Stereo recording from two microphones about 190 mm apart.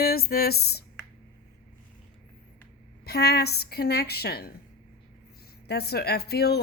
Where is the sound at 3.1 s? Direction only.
55° left (ahead or behind).